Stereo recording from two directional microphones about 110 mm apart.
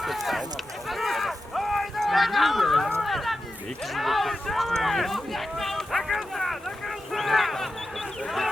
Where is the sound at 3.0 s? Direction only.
Centre (ahead or behind).